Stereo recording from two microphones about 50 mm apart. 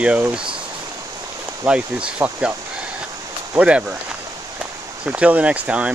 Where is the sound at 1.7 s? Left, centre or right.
Centre.